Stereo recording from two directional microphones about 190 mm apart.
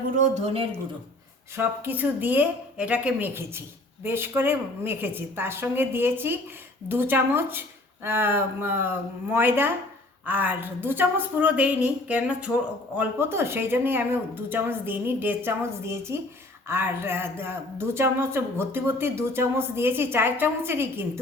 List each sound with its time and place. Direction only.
0.2 s speech: 35° right (ahead or behind)
1.5 s speech: 10° right (ahead or behind)